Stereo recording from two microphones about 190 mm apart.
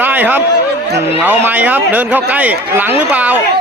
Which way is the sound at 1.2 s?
10° right (ahead or behind).